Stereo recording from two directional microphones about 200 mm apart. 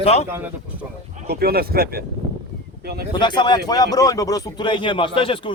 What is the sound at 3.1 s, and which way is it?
A man's voice, 20° left (ahead or behind).